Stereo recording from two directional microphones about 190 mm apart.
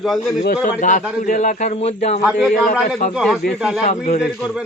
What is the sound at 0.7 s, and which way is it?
A man's voice, 45° left (ahead or behind).